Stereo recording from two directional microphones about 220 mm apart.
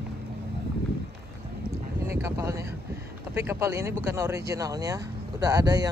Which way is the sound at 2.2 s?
15° right (ahead or behind).